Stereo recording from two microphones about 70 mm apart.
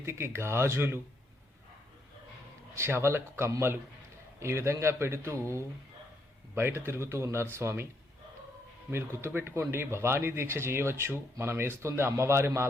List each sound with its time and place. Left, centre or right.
0.0 s speech: right
2.7 s speech: right
8.9 s speech: right